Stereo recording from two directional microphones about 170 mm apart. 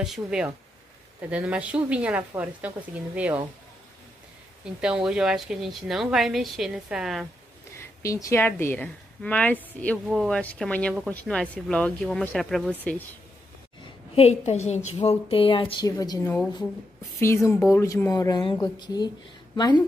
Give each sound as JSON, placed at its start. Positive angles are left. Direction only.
{"t": 0.0, "sound": "a woman's voice", "side_deg": -5}
{"t": 4.6, "sound": "speech", "side_deg": -5}
{"t": 7.7, "sound": "a woman's voice", "side_deg": 15}
{"t": 14.1, "sound": "a woman's voice", "side_deg": 40}